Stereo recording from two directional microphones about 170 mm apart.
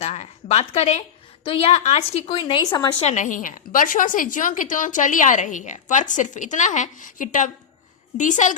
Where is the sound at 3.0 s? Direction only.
45° left (ahead or behind).